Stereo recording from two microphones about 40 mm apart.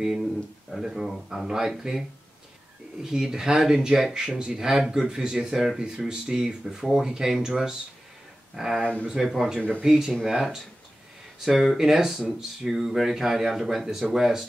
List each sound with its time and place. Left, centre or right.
0.2 s speech: centre